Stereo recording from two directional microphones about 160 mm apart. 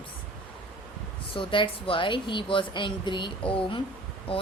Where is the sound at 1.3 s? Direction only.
30° left (ahead or behind).